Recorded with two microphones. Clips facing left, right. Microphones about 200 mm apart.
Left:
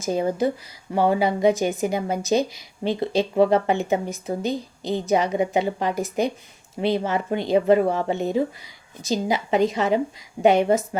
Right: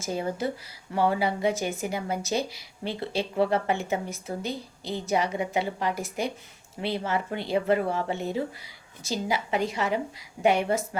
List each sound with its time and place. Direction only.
0.0 s a woman's voice: 20° left (ahead or behind)